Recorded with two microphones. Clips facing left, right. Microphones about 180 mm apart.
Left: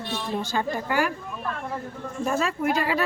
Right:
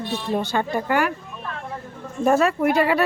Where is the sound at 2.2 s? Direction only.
60° right (ahead or behind).